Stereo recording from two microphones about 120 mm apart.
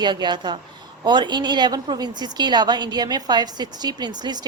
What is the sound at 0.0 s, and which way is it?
A woman's voice, 40° right (ahead or behind).